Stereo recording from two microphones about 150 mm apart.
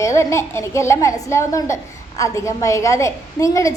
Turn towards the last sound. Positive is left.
turn(degrees=20)  # may be behind; listen again after turning